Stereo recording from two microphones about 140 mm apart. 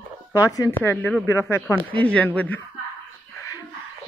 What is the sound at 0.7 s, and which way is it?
Speech, 10° left (ahead or behind).